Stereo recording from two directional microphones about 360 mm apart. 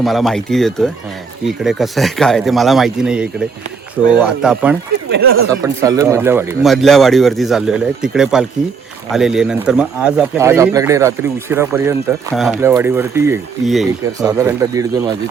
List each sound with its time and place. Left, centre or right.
0.0 s speech: centre
5.1 s speech: right
5.6 s speech: centre